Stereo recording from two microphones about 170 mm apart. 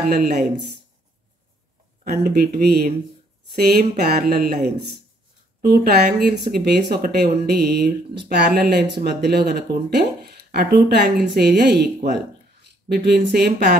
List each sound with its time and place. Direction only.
0.1 s speech: 70° right (ahead or behind)
2.0 s speech: 65° right (ahead or behind)